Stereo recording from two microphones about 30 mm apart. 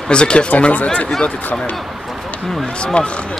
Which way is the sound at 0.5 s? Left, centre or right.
Left.